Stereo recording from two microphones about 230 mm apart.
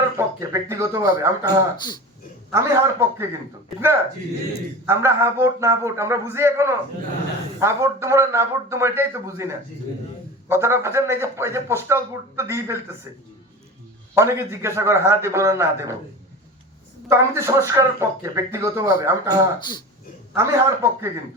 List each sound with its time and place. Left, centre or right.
0.2 s speech: centre
1.7 s speech: centre
2.5 s speech: centre
4.9 s speech: centre
14.2 s speech: centre
17.1 s speech: centre
19.5 s speech: centre
20.4 s speech: centre